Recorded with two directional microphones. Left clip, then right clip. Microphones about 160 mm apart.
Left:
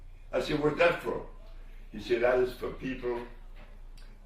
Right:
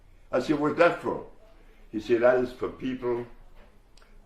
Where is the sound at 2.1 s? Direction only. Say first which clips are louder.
Right 4 dB; 40° right (ahead or behind).